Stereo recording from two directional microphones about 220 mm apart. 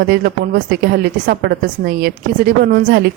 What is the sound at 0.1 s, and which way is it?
Speech, 45° right (ahead or behind).